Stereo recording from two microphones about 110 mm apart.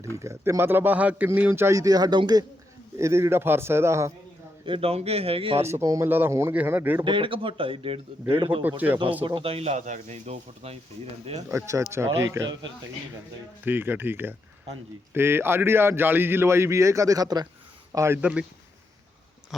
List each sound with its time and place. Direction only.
0.2 s a man's voice: 25° right (ahead or behind)
3.0 s a man's voice: 25° right (ahead or behind)
4.6 s a man's voice: 60° right (ahead or behind)
5.6 s a man's voice: 25° right (ahead or behind)
7.0 s a man's voice: 50° right (ahead or behind)
8.6 s a man's voice: 15° right (ahead or behind)
9.2 s speech: 55° right (ahead or behind); by 10.8 s 75° right (ahead or behind)
11.4 s a man's voice: 30° right (ahead or behind)
13.7 s a man's voice: 20° right (ahead or behind); by 17.5 s 35° right (ahead or behind)
17.9 s speech: 25° right (ahead or behind)
18.2 s a man's voice: 10° right (ahead or behind)